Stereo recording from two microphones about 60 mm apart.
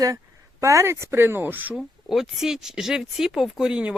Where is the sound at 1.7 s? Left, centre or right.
Centre.